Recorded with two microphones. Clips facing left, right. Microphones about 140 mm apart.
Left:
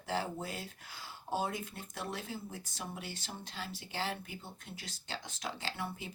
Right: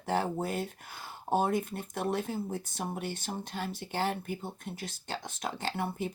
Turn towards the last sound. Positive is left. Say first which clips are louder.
# right 7 dB
turn(degrees=-55)  # may be behind; listen again after turning